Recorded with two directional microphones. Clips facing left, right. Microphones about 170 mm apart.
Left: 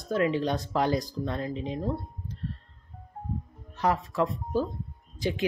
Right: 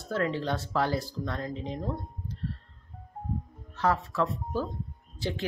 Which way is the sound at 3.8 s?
15° left (ahead or behind).